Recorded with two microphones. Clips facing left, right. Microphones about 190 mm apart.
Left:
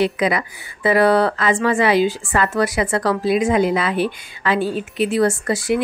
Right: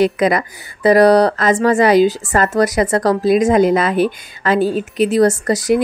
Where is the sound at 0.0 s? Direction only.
45° right (ahead or behind).